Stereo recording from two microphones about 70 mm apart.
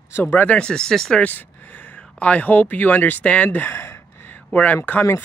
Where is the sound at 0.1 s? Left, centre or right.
Left; by 1.2 s centre.